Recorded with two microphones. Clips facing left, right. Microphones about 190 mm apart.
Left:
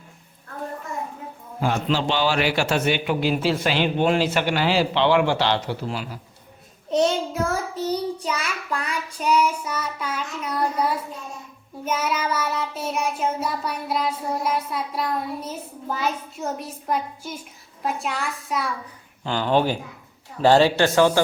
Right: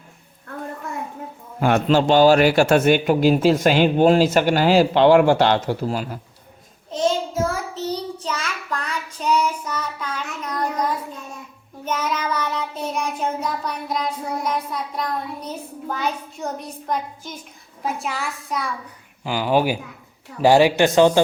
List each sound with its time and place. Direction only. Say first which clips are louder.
1.6 s a man's voice: right 6 dB; 55° right (ahead or behind)
6.9 s child singing: left 1 dB; 65° left (ahead or behind)
7.8 s child singing: left 2 dB; 10° left (ahead or behind)
19.2 s speech: right 1 dB; 10° right (ahead or behind)